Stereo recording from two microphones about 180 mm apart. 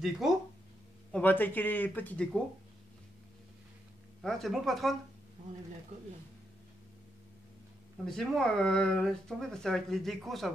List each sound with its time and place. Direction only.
0.0 s speech: centre (ahead or behind)
1.1 s speech: 10° left (ahead or behind)
4.2 s speech: centre (ahead or behind)
8.0 s speech: centre (ahead or behind)